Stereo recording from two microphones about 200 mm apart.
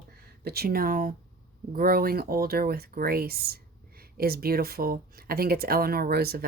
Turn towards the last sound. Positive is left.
turn(degrees=-50)  # may be behind; listen again after turning